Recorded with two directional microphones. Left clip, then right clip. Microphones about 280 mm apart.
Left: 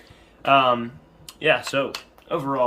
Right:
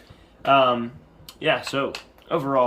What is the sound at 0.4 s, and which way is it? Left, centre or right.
Speech, centre.